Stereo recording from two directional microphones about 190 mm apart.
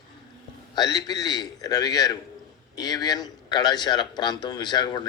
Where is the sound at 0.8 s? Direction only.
20° left (ahead or behind).